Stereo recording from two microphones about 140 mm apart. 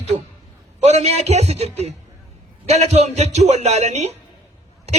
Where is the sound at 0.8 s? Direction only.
50° right (ahead or behind).